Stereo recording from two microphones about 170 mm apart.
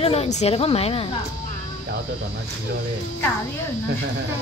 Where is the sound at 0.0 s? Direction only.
35° left (ahead or behind).